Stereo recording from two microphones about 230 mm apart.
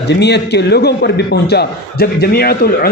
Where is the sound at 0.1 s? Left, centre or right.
Left.